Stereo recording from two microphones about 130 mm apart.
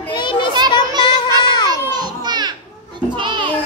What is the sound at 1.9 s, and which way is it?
Children playing, 35° right (ahead or behind).